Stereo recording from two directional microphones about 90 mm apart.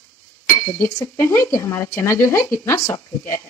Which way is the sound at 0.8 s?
30° left (ahead or behind).